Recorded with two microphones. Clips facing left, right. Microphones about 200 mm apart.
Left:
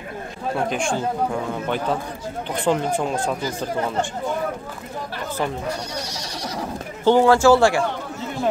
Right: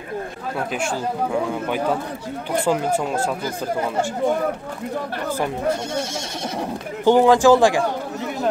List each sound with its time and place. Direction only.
0.7 s speech: 5° right (ahead or behind)
7.1 s a man's voice: 15° right (ahead or behind)